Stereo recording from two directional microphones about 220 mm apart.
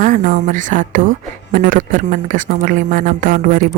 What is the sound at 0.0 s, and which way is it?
Speech, 40° right (ahead or behind).